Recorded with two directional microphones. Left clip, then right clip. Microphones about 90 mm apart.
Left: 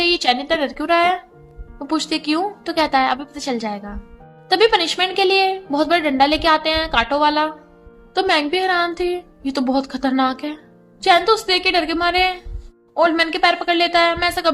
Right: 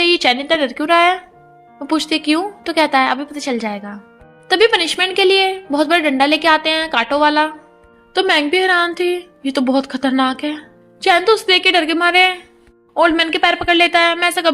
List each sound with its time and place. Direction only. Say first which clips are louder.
0.0 s a woman's voice: right 3 dB; 40° right (ahead or behind)